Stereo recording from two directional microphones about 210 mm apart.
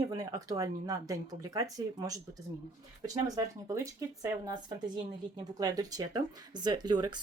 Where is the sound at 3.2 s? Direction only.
15° right (ahead or behind).